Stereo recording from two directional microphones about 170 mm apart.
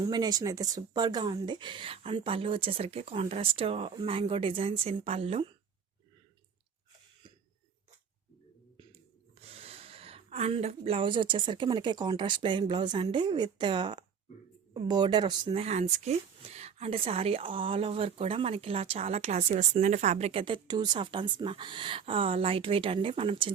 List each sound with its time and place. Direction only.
0.0 s speech: 25° right (ahead or behind)
9.3 s a woman's voice: 35° right (ahead or behind)